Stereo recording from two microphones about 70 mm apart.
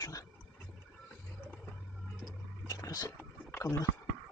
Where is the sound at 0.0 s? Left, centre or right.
Left.